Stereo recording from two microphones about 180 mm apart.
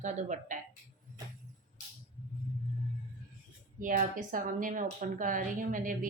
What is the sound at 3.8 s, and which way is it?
Speech, 50° right (ahead or behind).